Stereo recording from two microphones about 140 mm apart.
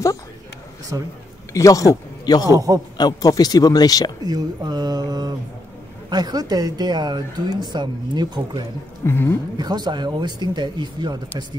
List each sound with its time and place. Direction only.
0.9 s speech: 25° right (ahead or behind)
1.5 s a man's voice: 25° left (ahead or behind)
2.5 s speech: 25° right (ahead or behind)
3.0 s speech: 25° left (ahead or behind)
4.2 s a sound: 30° right (ahead or behind)
6.0 s speech: 30° right (ahead or behind)
9.0 s speech: 15° left (ahead or behind)
9.6 s speech: 30° right (ahead or behind)